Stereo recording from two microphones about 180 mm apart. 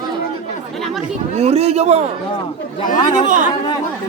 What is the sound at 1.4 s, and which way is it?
Speech, 35° right (ahead or behind).